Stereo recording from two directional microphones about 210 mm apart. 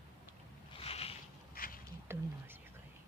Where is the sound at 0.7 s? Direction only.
25° left (ahead or behind).